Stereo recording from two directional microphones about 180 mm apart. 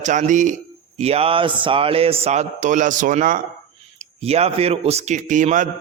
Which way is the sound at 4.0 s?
35° right (ahead or behind).